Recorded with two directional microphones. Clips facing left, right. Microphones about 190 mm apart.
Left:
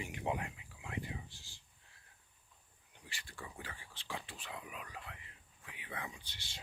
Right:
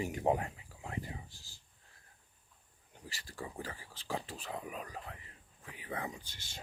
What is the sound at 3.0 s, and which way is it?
Speech, 40° right (ahead or behind).